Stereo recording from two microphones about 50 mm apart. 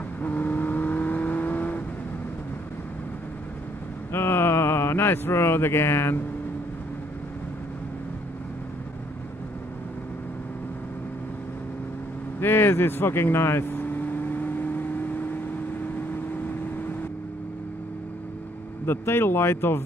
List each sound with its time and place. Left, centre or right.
0.2 s vehicle: left
4.1 s a sound: left
12.4 s vehicle: left
18.9 s speech: left